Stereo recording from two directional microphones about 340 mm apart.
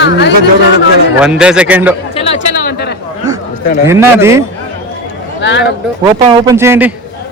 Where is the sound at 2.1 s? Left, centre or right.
Centre.